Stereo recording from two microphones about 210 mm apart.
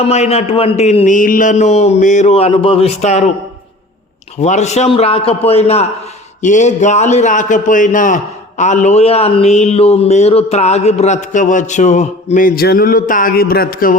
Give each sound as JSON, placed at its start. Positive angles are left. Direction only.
{"t": 0.0, "sound": "a man's voice", "side_deg": 30}
{"t": 4.4, "sound": "a man's voice", "side_deg": 35}